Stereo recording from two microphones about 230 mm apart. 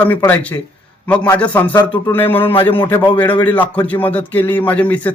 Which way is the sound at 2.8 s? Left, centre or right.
Left.